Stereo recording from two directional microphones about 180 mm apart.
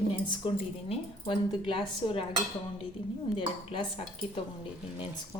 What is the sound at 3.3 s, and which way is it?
Speech, 35° left (ahead or behind).